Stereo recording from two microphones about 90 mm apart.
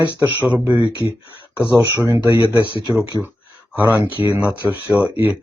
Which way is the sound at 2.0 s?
40° right (ahead or behind).